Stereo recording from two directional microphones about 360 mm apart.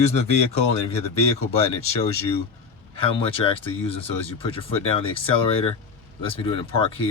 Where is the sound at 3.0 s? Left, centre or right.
Centre.